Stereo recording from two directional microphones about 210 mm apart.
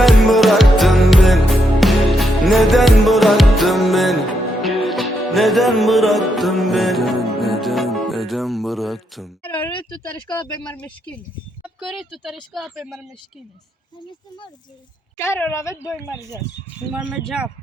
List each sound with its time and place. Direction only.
0.0 s music: centre (ahead or behind)
9.6 s speech: 20° left (ahead or behind)
10.3 s speech: 5° left (ahead or behind)
15.2 s speech: 10° left (ahead or behind)
16.9 s speech: 5° right (ahead or behind)